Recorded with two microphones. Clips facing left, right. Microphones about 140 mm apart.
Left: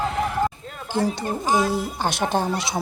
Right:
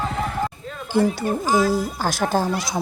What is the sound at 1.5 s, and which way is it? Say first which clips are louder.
Speech: right 1 dB; 20° left (ahead or behind).